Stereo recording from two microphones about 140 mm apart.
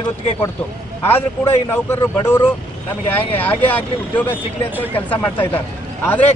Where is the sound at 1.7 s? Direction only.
15° left (ahead or behind).